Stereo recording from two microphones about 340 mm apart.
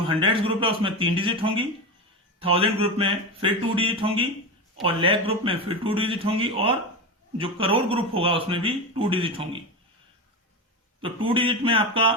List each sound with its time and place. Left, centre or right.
0.1 s speech: centre
11.3 s speech: centre